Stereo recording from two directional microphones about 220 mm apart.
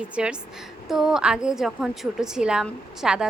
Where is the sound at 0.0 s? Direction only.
5° right (ahead or behind).